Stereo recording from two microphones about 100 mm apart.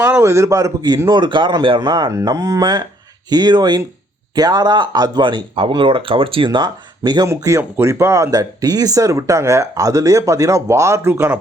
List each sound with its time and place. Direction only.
0.0 s speech: 30° right (ahead or behind)
1.1 s speech: 50° right (ahead or behind)
1.8 s speech: 45° right (ahead or behind)
7.3 s speech: 30° right (ahead or behind)
11.1 s speech: 20° right (ahead or behind)